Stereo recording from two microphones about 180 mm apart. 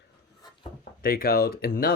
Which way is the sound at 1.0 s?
55° left (ahead or behind).